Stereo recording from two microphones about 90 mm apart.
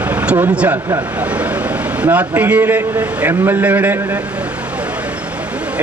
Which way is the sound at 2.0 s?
15° right (ahead or behind).